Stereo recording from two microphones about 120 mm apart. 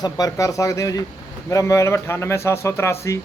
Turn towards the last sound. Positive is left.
turn(degrees=25)  # may be behind; listen again after turning